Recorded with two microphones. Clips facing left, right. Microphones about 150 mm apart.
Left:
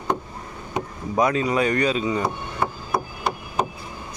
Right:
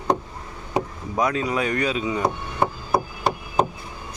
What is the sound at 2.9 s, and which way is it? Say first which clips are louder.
Chop: right 3 dB; 30° right (ahead or behind).